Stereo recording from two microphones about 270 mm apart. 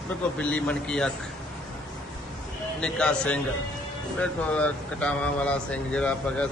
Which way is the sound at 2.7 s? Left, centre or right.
Centre.